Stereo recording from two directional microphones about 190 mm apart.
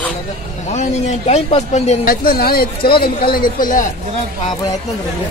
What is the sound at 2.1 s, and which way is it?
Speech, 50° left (ahead or behind).